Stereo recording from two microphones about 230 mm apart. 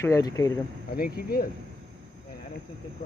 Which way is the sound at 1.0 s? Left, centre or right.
Left.